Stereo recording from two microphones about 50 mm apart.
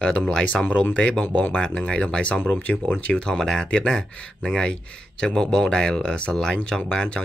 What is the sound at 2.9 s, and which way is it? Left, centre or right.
Speech, centre.